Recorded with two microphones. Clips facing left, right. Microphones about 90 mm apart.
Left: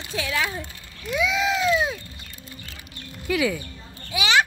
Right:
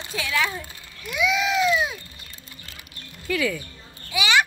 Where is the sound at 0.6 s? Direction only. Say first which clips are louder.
Left 2 dB; 35° left (ahead or behind).